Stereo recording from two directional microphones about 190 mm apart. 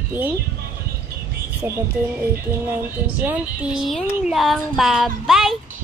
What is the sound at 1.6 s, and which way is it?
Speech, 15° right (ahead or behind).